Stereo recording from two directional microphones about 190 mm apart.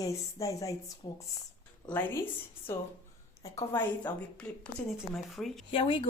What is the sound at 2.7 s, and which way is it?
Speech, 15° left (ahead or behind).